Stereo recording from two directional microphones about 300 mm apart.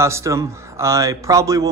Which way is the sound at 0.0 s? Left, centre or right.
Centre.